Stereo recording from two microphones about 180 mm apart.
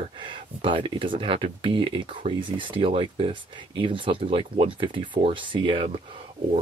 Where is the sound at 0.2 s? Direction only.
30° right (ahead or behind).